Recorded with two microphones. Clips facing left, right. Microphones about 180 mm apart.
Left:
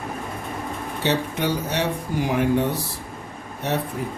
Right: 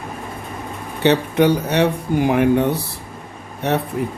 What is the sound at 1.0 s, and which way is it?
Speech, 60° right (ahead or behind).